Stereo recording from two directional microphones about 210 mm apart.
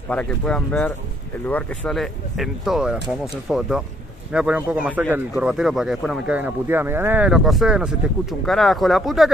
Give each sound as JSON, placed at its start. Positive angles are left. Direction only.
{"t": 0.1, "sound": "speech", "side_deg": 5}